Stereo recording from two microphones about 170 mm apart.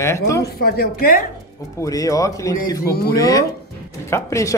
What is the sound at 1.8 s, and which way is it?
Speech, 20° left (ahead or behind).